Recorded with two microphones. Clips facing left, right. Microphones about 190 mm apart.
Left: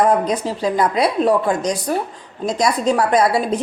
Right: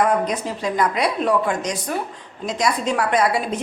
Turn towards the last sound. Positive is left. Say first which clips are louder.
# left 4 dB
turn(degrees=35)  # may be behind; listen again after turning